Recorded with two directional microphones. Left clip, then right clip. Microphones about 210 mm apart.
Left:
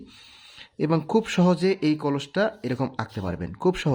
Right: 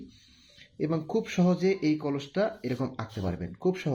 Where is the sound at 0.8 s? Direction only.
30° left (ahead or behind).